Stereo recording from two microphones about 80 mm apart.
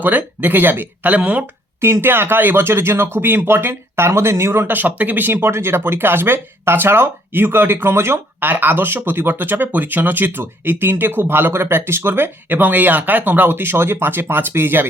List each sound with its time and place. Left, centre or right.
0.0 s speech: right
1.8 s speech: right